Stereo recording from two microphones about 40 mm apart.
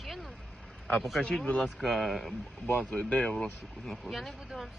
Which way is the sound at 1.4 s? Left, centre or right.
Left.